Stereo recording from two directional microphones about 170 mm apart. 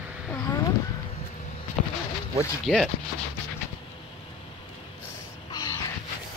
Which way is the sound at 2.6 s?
Centre (ahead or behind).